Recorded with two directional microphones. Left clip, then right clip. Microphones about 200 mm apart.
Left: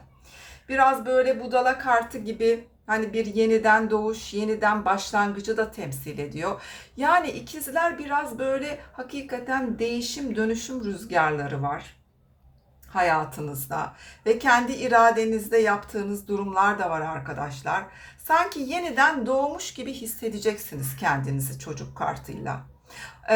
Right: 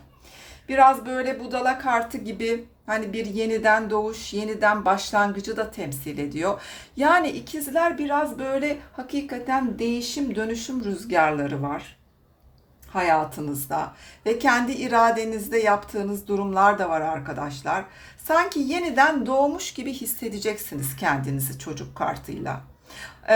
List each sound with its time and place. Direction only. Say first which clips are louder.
0.7 s a woman's voice: right 3 dB; 20° right (ahead or behind)
12.9 s a woman's voice: right 1 dB; 25° right (ahead or behind)